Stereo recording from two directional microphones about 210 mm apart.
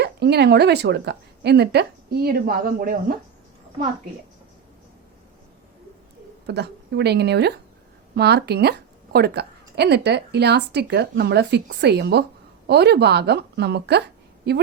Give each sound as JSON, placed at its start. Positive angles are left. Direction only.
{"t": 0.0, "sound": "speech", "side_deg": -50}
{"t": 6.5, "sound": "speech", "side_deg": -50}